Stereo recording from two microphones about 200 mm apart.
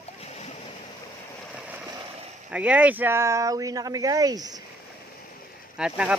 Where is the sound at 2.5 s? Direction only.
5° right (ahead or behind).